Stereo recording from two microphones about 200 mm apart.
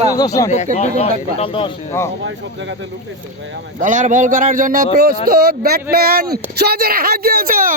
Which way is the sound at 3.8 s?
40° right (ahead or behind).